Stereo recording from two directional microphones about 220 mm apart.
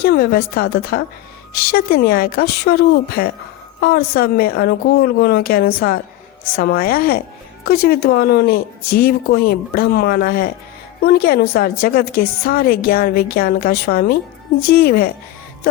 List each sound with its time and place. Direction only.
0.0 s a woman's voice: 45° left (ahead or behind)